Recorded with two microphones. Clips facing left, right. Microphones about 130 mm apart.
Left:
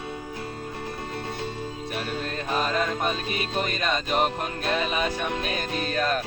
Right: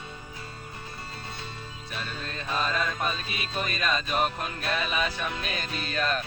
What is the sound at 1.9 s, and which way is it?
Music, 55° left (ahead or behind).